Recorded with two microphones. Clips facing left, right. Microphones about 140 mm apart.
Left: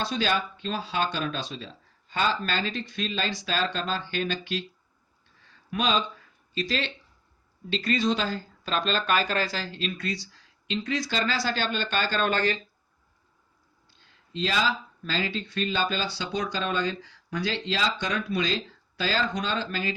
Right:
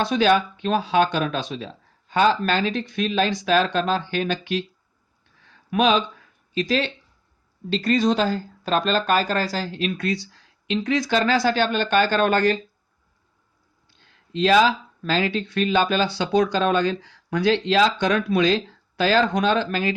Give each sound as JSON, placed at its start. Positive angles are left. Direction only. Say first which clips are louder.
{"t": 0.0, "sound": "speech", "louder": "right 8 dB", "side_deg": -55}
{"t": 5.7, "sound": "speech", "louder": "right 7 dB", "side_deg": -60}
{"t": 9.7, "sound": "speech", "louder": "right 7 dB", "side_deg": -55}
{"t": 14.3, "sound": "speech", "louder": "right 10 dB", "side_deg": -70}